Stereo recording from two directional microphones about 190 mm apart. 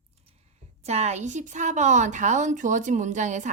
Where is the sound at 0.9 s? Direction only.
35° right (ahead or behind).